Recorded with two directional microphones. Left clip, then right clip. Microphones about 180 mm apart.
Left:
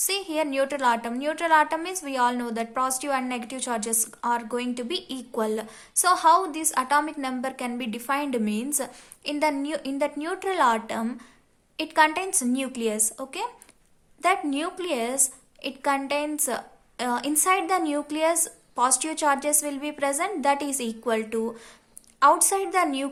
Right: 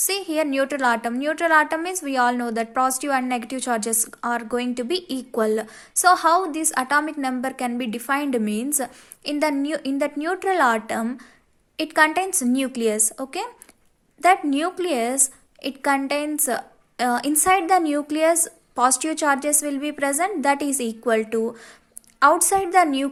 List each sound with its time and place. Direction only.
0.0 s a woman's voice: 25° right (ahead or behind)